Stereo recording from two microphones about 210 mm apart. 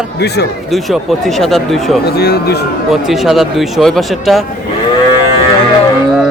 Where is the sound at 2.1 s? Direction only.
50° left (ahead or behind).